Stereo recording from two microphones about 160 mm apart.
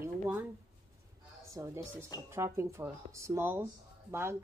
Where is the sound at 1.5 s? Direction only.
20° right (ahead or behind).